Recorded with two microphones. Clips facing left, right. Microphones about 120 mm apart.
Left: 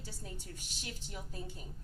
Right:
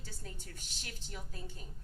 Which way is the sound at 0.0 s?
15° left (ahead or behind).